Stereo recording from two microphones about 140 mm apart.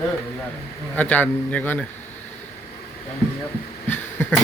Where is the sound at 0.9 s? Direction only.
10° left (ahead or behind).